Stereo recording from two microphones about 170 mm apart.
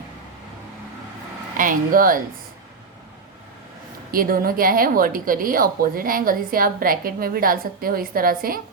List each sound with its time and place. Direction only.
1.5 s speech: 55° right (ahead or behind)
4.1 s a woman's voice: 60° right (ahead or behind)